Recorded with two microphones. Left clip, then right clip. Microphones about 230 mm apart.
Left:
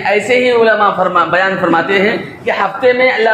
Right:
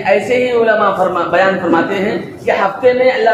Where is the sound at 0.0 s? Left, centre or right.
Left.